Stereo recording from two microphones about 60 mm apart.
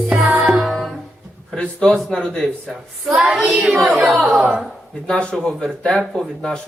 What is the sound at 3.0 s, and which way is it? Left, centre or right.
Child singing, centre.